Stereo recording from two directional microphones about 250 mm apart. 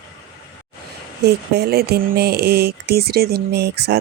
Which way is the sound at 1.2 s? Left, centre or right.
Right.